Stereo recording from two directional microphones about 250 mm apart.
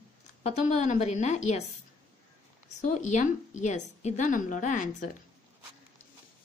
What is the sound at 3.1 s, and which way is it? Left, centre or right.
A woman's voice, left.